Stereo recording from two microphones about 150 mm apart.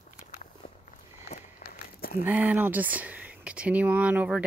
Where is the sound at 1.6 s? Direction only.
80° left.